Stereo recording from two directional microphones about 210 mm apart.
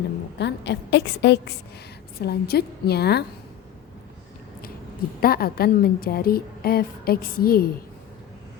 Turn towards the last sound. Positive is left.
turn(degrees=45)  # may be behind; listen again after turning